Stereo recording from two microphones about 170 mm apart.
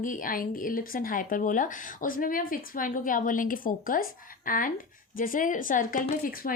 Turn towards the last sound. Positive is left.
turn(degrees=60)  # may be behind; listen again after turning